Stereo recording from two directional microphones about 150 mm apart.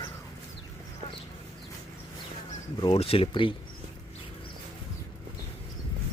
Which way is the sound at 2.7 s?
35° left (ahead or behind).